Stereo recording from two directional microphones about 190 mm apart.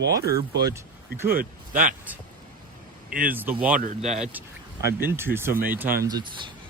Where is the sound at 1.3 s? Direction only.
50° right (ahead or behind).